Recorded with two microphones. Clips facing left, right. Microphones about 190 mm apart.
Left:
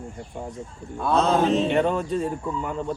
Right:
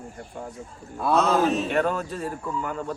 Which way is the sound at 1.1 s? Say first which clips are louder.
Left 1 dB; 30° left (ahead or behind).